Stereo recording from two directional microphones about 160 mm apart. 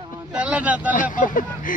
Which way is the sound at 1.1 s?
55° left (ahead or behind).